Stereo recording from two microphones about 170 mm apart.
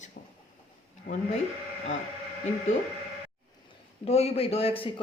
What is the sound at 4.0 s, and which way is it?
Speech, 35° left (ahead or behind).